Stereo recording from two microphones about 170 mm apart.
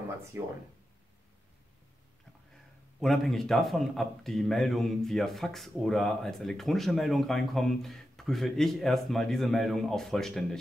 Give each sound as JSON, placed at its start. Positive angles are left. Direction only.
{"t": 0.3, "sound": "speech", "side_deg": -15}
{"t": 3.0, "sound": "speech", "side_deg": 0}